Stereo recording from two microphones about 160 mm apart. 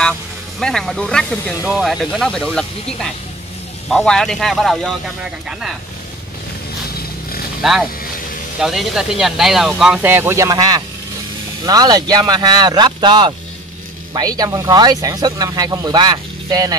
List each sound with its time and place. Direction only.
0.6 s speech: 5° left (ahead or behind)
1.6 s speech: 5° right (ahead or behind)
7.6 s speech: centre (ahead or behind); by 16.7 s 25° right (ahead or behind)